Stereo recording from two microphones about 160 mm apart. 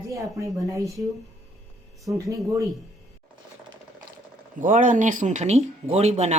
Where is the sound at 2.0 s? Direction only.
20° right (ahead or behind).